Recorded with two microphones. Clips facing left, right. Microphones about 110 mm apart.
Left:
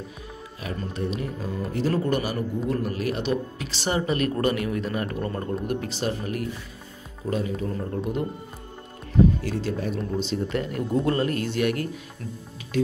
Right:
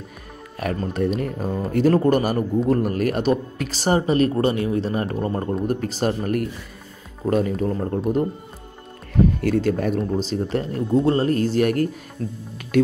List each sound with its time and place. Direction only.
0.6 s a man's voice: 65° right (ahead or behind); by 8.3 s 40° right (ahead or behind)
9.4 s speech: 55° right (ahead or behind)
9.9 s speech: 40° right (ahead or behind)
12.2 s speech: 30° right (ahead or behind)
12.7 s speech: 55° right (ahead or behind)